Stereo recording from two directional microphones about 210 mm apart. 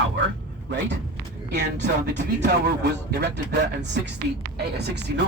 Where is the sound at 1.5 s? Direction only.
55° right (ahead or behind).